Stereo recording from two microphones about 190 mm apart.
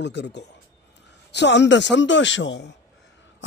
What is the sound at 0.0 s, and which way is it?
A man's voice, 65° left (ahead or behind).